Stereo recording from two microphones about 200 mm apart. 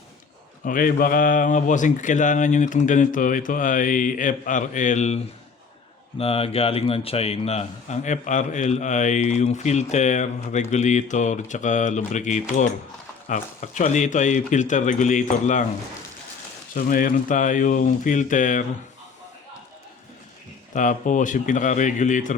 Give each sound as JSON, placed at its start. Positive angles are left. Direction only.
{"t": 0.6, "sound": "speech", "side_deg": 45}
{"t": 16.7, "sound": "speech", "side_deg": 45}
{"t": 20.7, "sound": "speech", "side_deg": 40}